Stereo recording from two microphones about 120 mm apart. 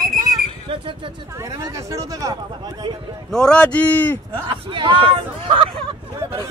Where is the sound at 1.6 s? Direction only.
30° right (ahead or behind).